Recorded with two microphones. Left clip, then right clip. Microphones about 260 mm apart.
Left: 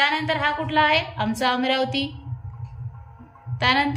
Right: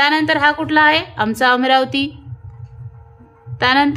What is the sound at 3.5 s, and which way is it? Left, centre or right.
Speech, centre.